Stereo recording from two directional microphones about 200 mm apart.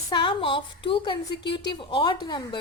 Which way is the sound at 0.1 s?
25° left (ahead or behind).